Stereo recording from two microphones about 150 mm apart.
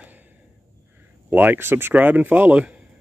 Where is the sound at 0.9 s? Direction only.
10° right (ahead or behind).